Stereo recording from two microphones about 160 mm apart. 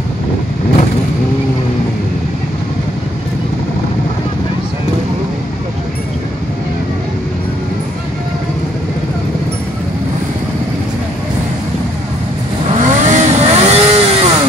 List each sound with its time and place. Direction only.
12.7 s vehicle: 50° right (ahead or behind)